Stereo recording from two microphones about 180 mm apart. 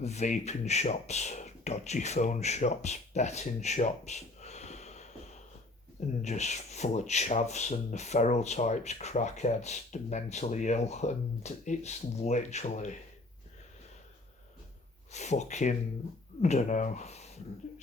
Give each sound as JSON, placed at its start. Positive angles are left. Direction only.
{"t": 0.0, "sound": "speech", "side_deg": 40}
{"t": 15.1, "sound": "speech", "side_deg": 40}